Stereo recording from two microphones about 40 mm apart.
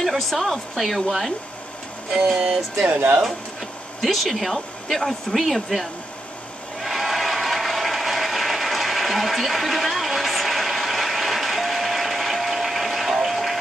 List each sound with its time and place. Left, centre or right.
0.0 s speech: centre
2.3 s music: right
2.9 s speech: right
4.0 s speech: centre
6.8 s ratchet: centre